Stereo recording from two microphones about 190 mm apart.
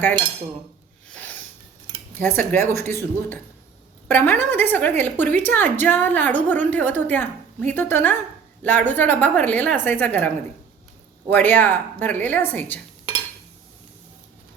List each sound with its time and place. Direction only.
2.1 s a woman's voice: 10° left (ahead or behind)